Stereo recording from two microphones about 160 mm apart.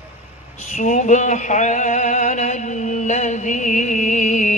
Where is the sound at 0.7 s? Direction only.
50° left (ahead or behind).